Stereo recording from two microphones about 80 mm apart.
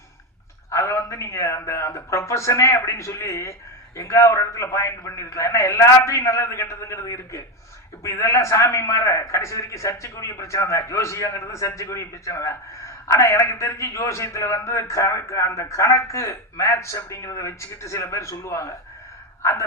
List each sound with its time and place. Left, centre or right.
0.7 s a man's voice: left